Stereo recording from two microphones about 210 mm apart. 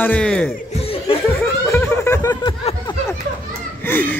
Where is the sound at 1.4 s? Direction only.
10° left (ahead or behind).